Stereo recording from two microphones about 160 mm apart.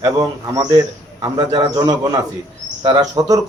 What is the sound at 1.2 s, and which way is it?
A man's voice, 25° right (ahead or behind).